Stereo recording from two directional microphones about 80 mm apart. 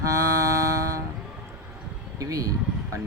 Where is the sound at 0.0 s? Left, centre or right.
Right.